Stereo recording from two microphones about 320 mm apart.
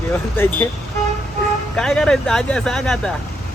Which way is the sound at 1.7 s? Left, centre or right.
Centre.